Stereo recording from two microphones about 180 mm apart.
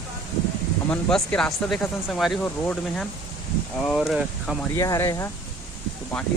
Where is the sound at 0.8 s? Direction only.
5° left (ahead or behind).